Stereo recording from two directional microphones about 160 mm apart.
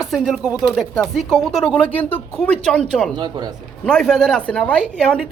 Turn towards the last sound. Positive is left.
turn(degrees=5)  # may be behind; listen again after turning